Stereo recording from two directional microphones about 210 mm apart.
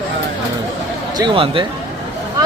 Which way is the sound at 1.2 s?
25° right (ahead or behind).